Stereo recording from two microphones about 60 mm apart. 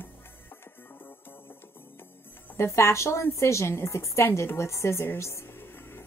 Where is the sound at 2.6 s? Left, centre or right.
Left.